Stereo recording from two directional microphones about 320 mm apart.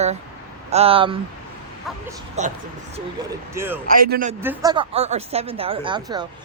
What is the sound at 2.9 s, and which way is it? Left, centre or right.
Speech, centre.